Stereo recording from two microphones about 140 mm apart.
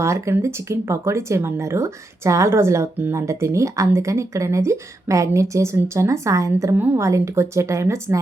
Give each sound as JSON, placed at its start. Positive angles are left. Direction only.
{"t": 0.0, "sound": "speech", "side_deg": -20}